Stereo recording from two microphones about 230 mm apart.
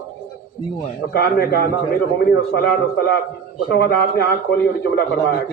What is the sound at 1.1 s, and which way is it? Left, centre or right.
Speech, left.